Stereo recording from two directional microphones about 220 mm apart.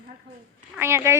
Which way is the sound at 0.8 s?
10° right (ahead or behind).